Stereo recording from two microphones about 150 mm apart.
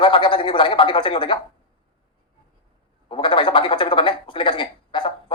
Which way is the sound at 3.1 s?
35° left (ahead or behind).